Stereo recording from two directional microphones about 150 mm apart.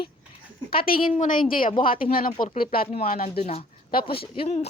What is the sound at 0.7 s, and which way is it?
Speech, 80° left.